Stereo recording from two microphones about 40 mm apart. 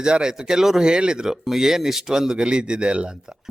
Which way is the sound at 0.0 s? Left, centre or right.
Right.